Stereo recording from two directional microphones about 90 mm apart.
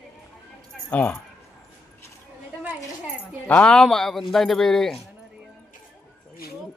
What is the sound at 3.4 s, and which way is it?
Speech, 10° left (ahead or behind).